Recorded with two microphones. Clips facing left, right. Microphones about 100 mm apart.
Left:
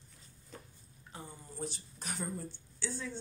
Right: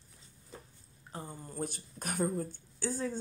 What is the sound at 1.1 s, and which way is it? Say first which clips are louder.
Speech: right 5 dB; 50° right (ahead or behind).